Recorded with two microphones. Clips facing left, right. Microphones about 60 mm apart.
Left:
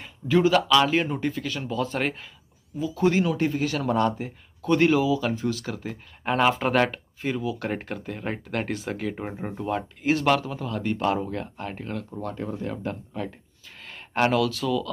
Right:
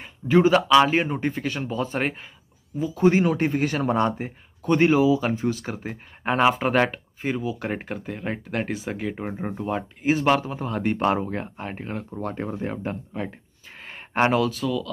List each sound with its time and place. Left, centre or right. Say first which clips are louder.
0.3 s speech: right 3 dB; right
2.9 s speech: right 3 dB; right
4.6 s speech: right 2 dB; centre
10.6 s speech: right 3 dB; right
12.2 s speech: right 4 dB; right
13.7 s a sound: right 2 dB; right
14.5 s speech: even; centre